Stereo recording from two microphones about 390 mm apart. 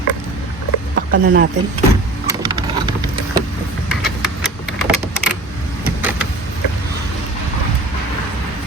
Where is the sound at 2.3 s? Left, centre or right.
Centre.